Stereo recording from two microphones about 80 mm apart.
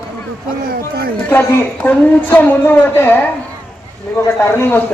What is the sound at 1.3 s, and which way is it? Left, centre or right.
Speech, left.